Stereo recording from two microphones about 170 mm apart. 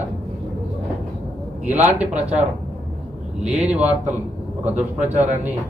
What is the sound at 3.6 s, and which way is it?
Speech, 10° right (ahead or behind).